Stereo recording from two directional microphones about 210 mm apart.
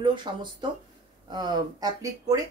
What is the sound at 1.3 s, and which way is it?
Speech, 20° right (ahead or behind).